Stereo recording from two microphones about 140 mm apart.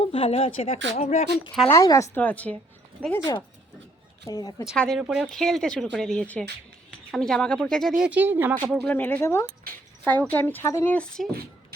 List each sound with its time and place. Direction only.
0.0 s speech: 45° left (ahead or behind)
0.9 s speech: 55° left (ahead or behind)
1.7 s speech: 20° left (ahead or behind)
2.2 s speech: 10° left (ahead or behind)
3.0 s speech: 5° right (ahead or behind)
4.3 s speech: 25° left (ahead or behind)
4.8 s speech: centre (ahead or behind)
8.7 s speech: 10° left (ahead or behind)